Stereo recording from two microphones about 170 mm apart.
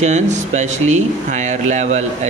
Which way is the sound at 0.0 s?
45° right (ahead or behind).